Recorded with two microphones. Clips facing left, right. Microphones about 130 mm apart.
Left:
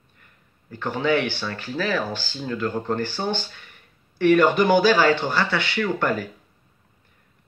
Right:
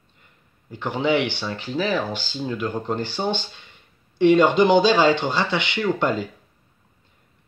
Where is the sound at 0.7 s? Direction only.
20° right (ahead or behind).